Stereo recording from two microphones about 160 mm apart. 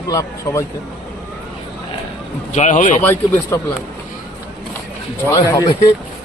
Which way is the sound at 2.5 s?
50° left (ahead or behind).